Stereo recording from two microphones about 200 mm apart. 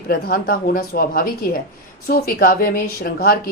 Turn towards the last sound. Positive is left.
turn(degrees=45)  # may be behind; listen again after turning